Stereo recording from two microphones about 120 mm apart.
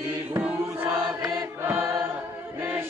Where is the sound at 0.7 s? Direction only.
20° right (ahead or behind).